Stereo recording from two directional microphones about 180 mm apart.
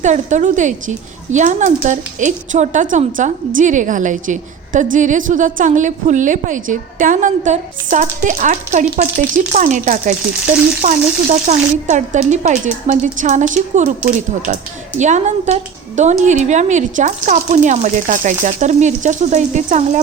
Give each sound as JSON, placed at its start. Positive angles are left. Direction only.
{"t": 0.0, "sound": "a woman's voice", "side_deg": -40}